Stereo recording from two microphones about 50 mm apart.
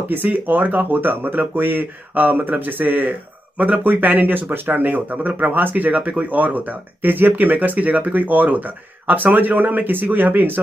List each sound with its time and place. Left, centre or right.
0.1 s speech: right